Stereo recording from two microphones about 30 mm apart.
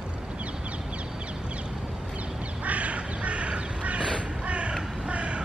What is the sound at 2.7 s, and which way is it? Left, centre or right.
Crow, right.